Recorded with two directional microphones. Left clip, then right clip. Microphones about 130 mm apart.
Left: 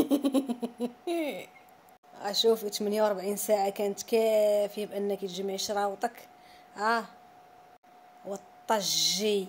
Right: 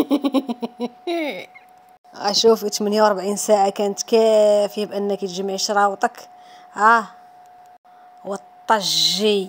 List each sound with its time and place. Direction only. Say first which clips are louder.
0.1 s a sound: right 7 dB; 35° right (ahead or behind)
2.1 s speech: right 10 dB; 75° right (ahead or behind); by 7.1 s 45° right (ahead or behind)
8.3 s a woman's voice: right 10 dB; 40° right (ahead or behind)